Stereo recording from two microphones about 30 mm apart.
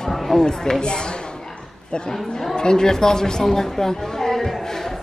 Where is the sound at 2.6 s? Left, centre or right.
Left.